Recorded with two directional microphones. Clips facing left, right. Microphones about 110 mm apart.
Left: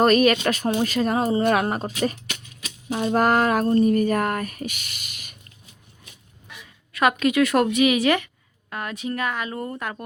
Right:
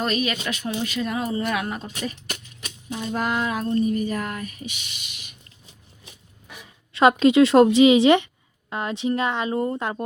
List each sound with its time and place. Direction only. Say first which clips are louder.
0.0 s speech: left 8 dB; 50° left (ahead or behind)
2.9 s speech: left 6 dB; 55° left (ahead or behind)
6.9 s a woman's voice: right 4 dB; 25° right (ahead or behind)